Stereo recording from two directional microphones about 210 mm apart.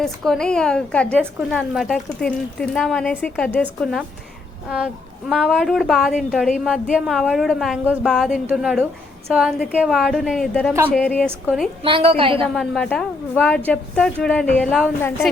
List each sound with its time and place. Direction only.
0.0 s a woman's voice: 5° left (ahead or behind)
5.3 s a woman's voice: centre (ahead or behind)
11.8 s a woman's voice: 25° right (ahead or behind)
12.5 s a woman's voice: 5° left (ahead or behind)